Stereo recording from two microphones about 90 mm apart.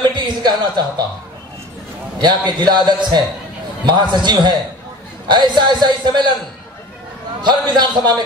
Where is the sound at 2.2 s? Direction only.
55° right (ahead or behind).